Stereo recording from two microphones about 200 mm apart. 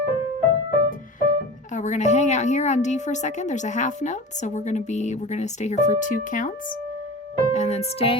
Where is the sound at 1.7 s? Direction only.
35° left (ahead or behind).